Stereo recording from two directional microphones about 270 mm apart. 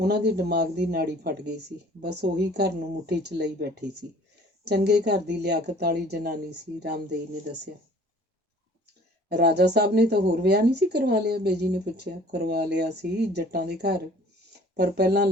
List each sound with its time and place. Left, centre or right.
0.0 s speech: right
9.3 s speech: right